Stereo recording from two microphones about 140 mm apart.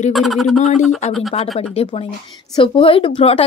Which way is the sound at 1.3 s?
45° left (ahead or behind).